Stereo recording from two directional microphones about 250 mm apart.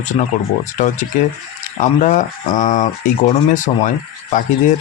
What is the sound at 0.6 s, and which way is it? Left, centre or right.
Speech, left.